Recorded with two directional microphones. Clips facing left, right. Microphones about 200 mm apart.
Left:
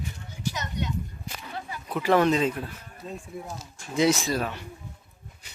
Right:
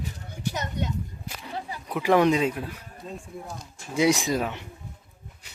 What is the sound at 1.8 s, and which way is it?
Speech, 15° right (ahead or behind).